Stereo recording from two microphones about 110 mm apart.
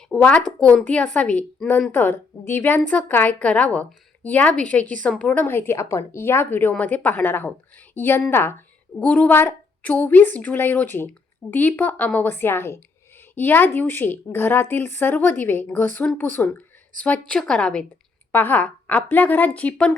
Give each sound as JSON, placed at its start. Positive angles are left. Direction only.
{"t": 0.1, "sound": "a woman's voice", "side_deg": 10}